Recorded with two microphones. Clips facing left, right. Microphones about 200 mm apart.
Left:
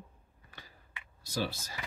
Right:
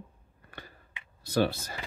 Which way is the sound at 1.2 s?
60° right (ahead or behind).